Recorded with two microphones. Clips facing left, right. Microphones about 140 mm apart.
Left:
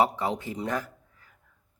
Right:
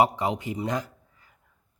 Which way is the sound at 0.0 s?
15° right (ahead or behind).